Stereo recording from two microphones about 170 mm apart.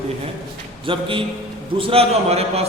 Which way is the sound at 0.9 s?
30° right (ahead or behind).